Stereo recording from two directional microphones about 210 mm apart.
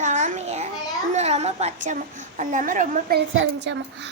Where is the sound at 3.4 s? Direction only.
60° right (ahead or behind).